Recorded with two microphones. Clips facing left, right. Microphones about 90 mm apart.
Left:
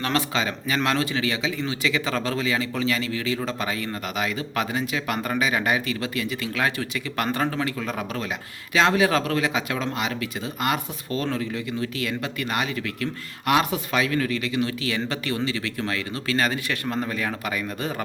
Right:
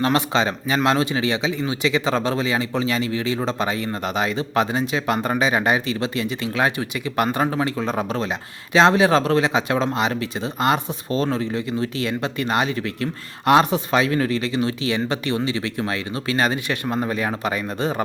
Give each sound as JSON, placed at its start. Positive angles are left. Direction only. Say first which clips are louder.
{"t": 0.0, "sound": "speech", "louder": "right 5 dB", "side_deg": -20}